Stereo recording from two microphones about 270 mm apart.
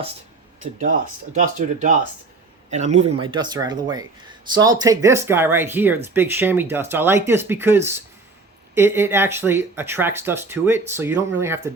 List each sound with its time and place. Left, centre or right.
1.3 s speech: right; by 11.7 s centre